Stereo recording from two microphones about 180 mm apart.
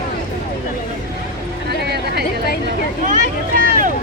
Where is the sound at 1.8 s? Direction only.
65° right (ahead or behind).